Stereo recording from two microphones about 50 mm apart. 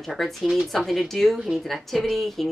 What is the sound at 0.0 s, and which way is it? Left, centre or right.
Speech, centre.